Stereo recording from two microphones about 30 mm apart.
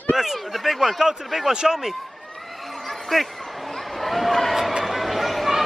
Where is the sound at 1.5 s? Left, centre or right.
Right.